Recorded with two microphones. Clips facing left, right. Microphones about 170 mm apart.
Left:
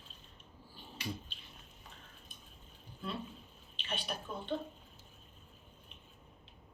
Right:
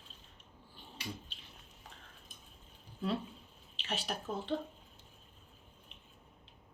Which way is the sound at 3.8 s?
85° right.